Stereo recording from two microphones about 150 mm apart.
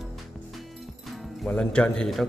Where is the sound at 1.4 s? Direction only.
10° left (ahead or behind).